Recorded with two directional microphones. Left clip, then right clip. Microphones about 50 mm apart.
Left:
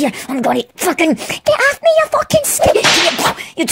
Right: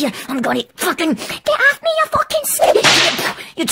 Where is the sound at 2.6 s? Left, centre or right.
Centre.